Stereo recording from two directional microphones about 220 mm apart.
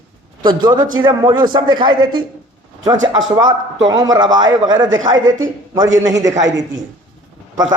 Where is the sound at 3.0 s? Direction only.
60° right (ahead or behind).